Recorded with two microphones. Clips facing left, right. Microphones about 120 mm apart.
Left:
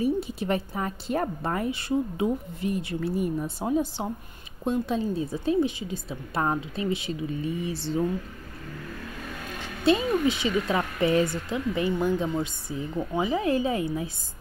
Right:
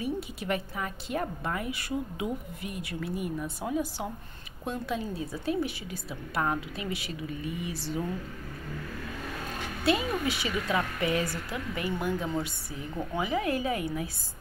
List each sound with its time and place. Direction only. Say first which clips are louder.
0.0 s a woman's voice: left 7 dB; 30° left (ahead or behind)
9.8 s a woman's voice: left 5 dB; 25° left (ahead or behind)